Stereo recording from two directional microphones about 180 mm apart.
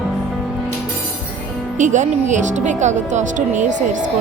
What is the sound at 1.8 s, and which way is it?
Speech, 40° right (ahead or behind).